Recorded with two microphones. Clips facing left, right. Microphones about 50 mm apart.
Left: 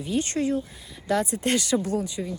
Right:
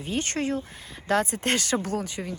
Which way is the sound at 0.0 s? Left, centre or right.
Right.